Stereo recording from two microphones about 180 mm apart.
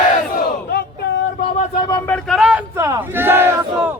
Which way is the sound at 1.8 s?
15° left (ahead or behind).